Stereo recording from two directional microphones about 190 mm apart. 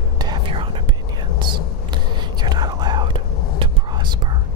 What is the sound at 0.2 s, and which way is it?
Whispering, 25° right (ahead or behind).